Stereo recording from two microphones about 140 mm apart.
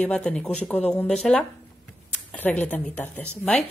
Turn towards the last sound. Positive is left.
turn(degrees=10)  # may be behind; listen again after turning